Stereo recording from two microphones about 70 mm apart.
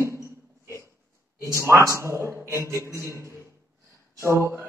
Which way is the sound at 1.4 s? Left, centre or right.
Right.